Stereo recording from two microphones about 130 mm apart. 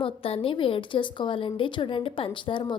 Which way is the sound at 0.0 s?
45° left (ahead or behind).